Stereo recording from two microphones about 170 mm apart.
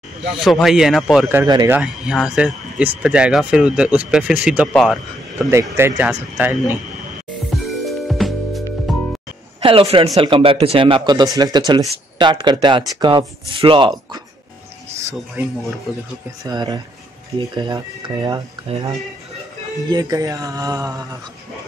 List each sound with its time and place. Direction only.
0.4 s speech: centre (ahead or behind)
1.3 s speech: 20° right (ahead or behind)
1.7 s speech: 5° right (ahead or behind)
5.5 s speech: 15° right (ahead or behind)
7.5 s music: centre (ahead or behind)
9.6 s a man's voice: 35° right (ahead or behind)
16.4 s speech: 25° right (ahead or behind)